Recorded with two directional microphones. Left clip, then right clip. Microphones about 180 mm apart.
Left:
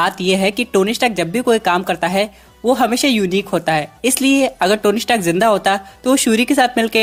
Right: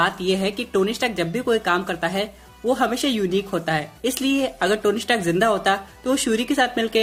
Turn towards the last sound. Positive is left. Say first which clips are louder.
# left 6 dB
turn(degrees=45)  # may be behind; listen again after turning